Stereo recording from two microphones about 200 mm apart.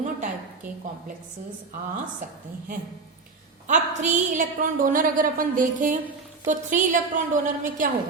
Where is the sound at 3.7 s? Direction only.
40° right (ahead or behind).